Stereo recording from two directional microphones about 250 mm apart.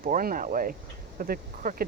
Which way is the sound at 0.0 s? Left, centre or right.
Right.